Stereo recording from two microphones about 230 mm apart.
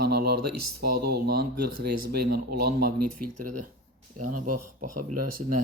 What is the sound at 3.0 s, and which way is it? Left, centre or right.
Speech, right.